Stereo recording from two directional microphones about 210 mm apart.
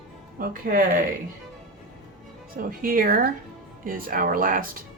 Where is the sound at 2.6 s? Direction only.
40° right (ahead or behind).